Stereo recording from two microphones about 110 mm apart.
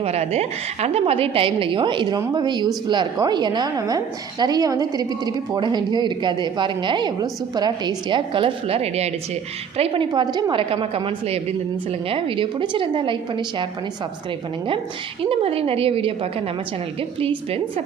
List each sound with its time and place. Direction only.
0.0 s a woman's voice: 75° right (ahead or behind); by 10.1 s 60° right (ahead or behind)
10.1 s a woman's voice: 40° right (ahead or behind)
10.5 s a woman's voice: 50° right (ahead or behind)
15.2 s a woman's voice: 55° right (ahead or behind)